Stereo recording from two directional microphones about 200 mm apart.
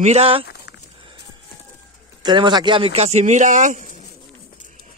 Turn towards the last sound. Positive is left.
turn(degrees=-40)  # may be behind; listen again after turning